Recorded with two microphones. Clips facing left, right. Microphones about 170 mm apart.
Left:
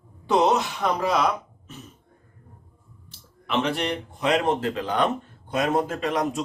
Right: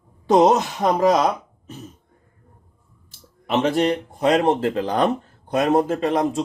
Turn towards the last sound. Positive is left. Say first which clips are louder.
# right 5 dB
turn(degrees=-30)  # may be behind; listen again after turning